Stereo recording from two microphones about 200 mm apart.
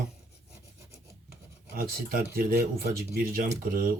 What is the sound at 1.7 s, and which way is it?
Speech, 45° right (ahead or behind).